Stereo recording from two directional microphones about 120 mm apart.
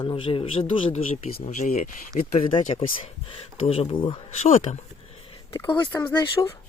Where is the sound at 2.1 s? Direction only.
60° left (ahead or behind); by 4.2 s 45° left (ahead or behind).